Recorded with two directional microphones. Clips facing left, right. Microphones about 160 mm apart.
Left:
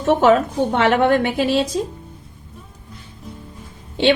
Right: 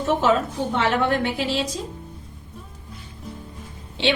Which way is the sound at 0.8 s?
65° left (ahead or behind).